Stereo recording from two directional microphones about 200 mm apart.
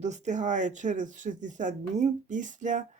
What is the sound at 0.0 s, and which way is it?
Speech, 35° right (ahead or behind).